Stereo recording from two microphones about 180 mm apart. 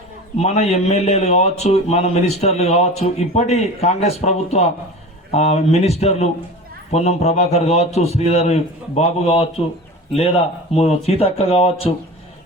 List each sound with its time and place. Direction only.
0.3 s a man's voice: 35° left (ahead or behind)
10.8 s a man's voice: 35° left (ahead or behind)